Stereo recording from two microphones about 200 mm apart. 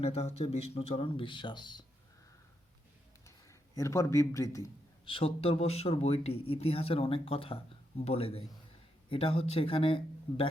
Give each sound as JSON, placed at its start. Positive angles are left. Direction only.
{"t": 0.0, "sound": "speech", "side_deg": 30}
{"t": 3.2, "sound": "a sound", "side_deg": 15}
{"t": 5.1, "sound": "speech", "side_deg": 30}